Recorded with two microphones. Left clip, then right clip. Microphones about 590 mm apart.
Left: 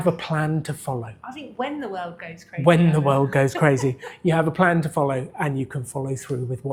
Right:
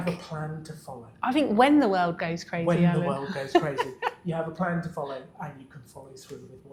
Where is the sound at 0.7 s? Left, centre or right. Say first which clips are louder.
Left 11 dB; left.